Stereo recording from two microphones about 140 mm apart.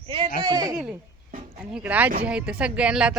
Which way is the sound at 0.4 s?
25° right (ahead or behind).